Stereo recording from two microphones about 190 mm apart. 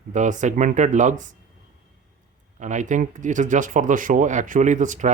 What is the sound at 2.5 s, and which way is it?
Speech, 40° right (ahead or behind).